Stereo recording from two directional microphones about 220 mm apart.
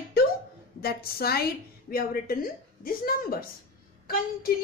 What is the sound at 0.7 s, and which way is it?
A woman's voice, 45° left (ahead or behind).